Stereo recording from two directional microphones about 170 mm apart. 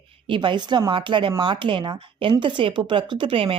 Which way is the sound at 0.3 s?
25° right (ahead or behind).